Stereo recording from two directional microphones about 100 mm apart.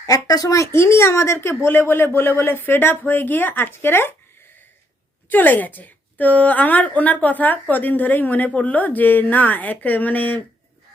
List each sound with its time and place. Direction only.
0.0 s speech: 40° left (ahead or behind); by 4.1 s 25° left (ahead or behind)
5.3 s a woman's voice: 20° left (ahead or behind)